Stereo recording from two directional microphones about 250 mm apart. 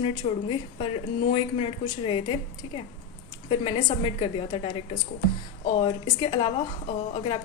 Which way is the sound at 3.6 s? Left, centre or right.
Left.